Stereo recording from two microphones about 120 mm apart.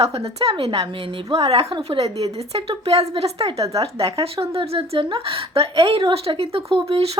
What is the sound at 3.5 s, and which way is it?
Speech, 30° right (ahead or behind).